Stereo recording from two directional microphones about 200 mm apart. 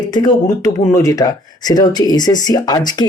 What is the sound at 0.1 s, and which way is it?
Speech, 20° left (ahead or behind).